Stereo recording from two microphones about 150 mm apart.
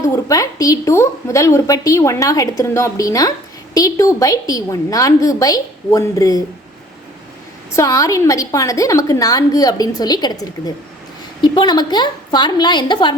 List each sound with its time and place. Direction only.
0.0 s a woman's voice: 20° left (ahead or behind)
7.7 s a woman's voice: 20° left (ahead or behind)
11.3 s a woman's voice: 30° left (ahead or behind)